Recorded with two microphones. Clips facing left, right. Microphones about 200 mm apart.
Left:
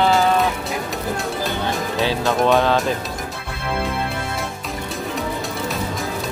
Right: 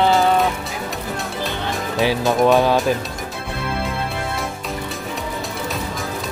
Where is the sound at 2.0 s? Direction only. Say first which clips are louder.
Right 3 dB; 15° right (ahead or behind).